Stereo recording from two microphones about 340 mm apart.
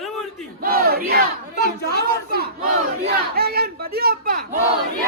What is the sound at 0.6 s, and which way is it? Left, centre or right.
Battle cry, right.